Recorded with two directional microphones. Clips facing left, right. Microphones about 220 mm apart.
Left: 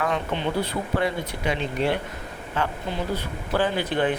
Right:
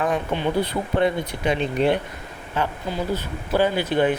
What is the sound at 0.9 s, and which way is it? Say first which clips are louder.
Speech: right 5 dB; 20° right (ahead or behind).